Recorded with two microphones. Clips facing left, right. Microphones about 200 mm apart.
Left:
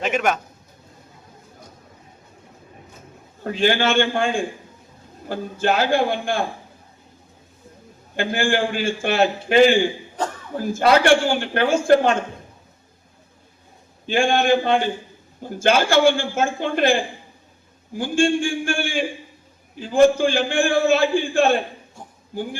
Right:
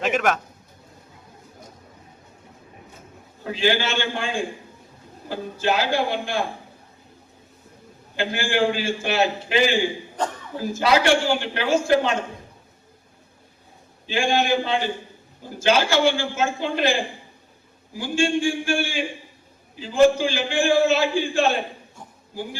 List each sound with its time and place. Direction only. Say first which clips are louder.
0.0 s a man's voice: even; centre (ahead or behind)
3.4 s a man's voice: left 3 dB; 50° left (ahead or behind)
8.1 s a man's voice: left 3 dB; 50° left (ahead or behind)
14.1 s a man's voice: left 3 dB; 50° left (ahead or behind)